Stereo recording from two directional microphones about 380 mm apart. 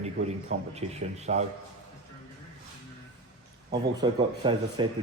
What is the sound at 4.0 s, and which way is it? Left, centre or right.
Speech, centre.